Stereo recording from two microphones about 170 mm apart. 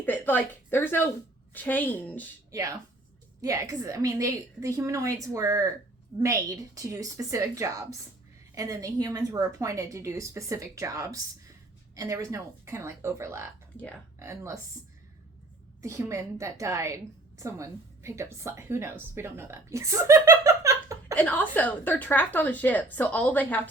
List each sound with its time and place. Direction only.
0.0 s a woman's voice: 10° left (ahead or behind)
2.5 s a woman's voice: 20° right (ahead or behind)
13.7 s a woman's voice: 5° left (ahead or behind)
14.2 s speech: 15° right (ahead or behind)
15.8 s a woman's voice: 15° right (ahead or behind)
21.2 s a woman's voice: 10° left (ahead or behind)